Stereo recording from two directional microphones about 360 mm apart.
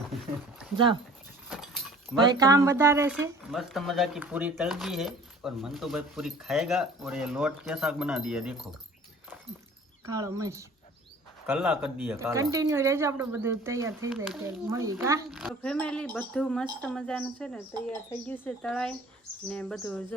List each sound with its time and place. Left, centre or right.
1.5 s vehicle: centre
2.2 s speech: centre
10.1 s speech: centre